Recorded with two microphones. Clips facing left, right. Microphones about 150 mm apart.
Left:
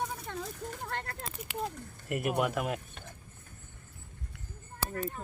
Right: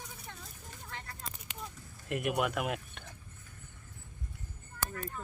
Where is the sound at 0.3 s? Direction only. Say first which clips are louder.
Left 11 dB; 80° left; by 1.9 s 60° left (ahead or behind).